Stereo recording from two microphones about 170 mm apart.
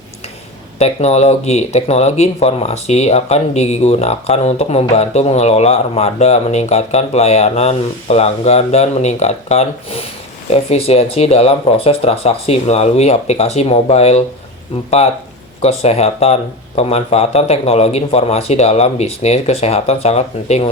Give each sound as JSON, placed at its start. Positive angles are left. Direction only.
{"t": 0.8, "sound": "speech", "side_deg": 40}